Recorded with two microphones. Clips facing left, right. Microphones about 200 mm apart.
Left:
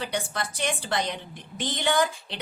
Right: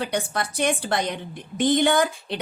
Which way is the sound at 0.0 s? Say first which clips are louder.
Right 4 dB; 50° right (ahead or behind).